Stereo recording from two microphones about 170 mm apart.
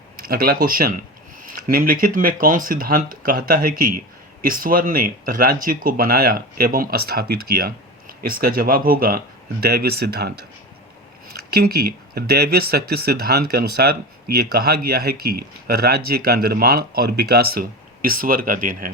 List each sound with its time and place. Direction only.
0.2 s speech: 60° right (ahead or behind)
11.5 s speech: 65° right (ahead or behind)